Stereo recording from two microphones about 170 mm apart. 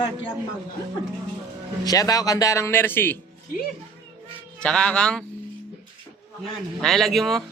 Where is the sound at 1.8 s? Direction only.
20° left (ahead or behind).